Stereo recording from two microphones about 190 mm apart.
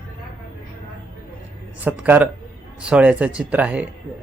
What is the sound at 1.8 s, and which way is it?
Speech, 5° right (ahead or behind).